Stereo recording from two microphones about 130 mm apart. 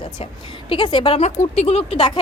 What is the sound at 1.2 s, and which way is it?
A woman's voice, 60° left (ahead or behind).